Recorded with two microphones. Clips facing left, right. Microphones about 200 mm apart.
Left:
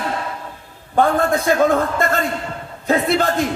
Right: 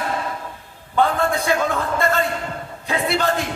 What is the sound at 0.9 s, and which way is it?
A man's voice, 50° left (ahead or behind).